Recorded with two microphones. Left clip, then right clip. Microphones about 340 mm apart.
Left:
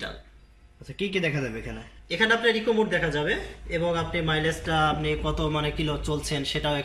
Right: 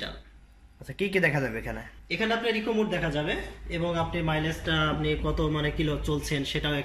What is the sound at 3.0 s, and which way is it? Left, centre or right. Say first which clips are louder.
Speech: left 3 dB; centre.